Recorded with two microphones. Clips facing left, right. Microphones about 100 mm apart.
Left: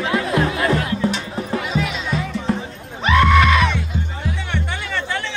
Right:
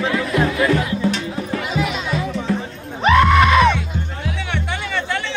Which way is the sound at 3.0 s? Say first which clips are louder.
Right 2 dB; 20° right (ahead or behind).